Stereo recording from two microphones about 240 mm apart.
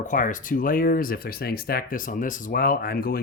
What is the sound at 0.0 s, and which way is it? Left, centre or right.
Speech, left.